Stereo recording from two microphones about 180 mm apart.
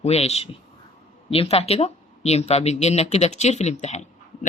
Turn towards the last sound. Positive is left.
turn(degrees=40)  # may be behind; listen again after turning